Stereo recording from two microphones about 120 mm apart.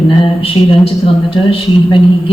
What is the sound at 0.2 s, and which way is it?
Speech, 50° left (ahead or behind).